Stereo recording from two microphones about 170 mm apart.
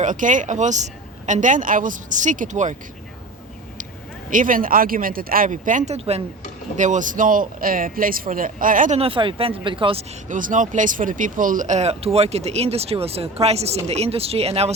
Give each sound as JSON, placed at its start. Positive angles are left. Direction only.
{"t": 0.0, "sound": "speech", "side_deg": -50}
{"t": 4.3, "sound": "speech", "side_deg": -50}
{"t": 9.0, "sound": "speech", "side_deg": -30}
{"t": 10.2, "sound": "speech", "side_deg": -50}